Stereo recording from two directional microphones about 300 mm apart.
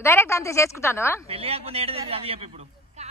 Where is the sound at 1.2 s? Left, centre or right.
Centre.